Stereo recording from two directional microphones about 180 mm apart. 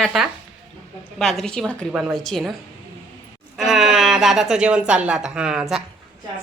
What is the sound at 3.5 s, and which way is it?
A woman's voice, centre (ahead or behind).